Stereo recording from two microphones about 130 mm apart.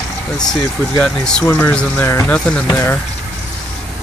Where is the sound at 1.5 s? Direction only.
20° left (ahead or behind).